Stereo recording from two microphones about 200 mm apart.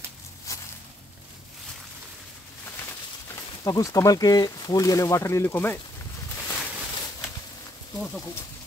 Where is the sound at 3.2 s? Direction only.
15° left (ahead or behind).